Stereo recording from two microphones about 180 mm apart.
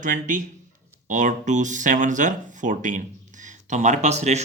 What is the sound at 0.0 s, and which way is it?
Speech, 45° right (ahead or behind).